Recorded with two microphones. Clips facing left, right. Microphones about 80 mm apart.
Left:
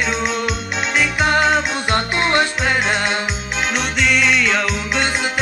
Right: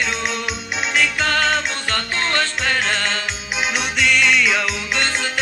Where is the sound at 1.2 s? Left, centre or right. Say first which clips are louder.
Left 4 dB; centre.